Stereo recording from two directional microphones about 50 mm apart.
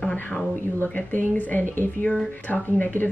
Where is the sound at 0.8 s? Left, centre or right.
Left.